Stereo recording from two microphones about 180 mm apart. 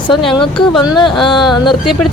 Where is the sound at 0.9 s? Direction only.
25° left (ahead or behind).